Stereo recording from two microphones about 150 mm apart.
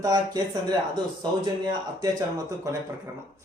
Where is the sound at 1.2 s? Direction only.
25° right (ahead or behind).